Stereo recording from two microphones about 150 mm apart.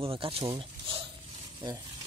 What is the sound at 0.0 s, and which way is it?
Speech, 40° right (ahead or behind).